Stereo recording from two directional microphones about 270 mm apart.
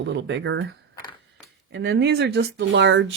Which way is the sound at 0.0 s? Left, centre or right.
Right.